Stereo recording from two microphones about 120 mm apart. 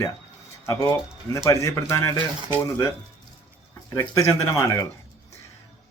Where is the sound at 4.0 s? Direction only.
25° left (ahead or behind).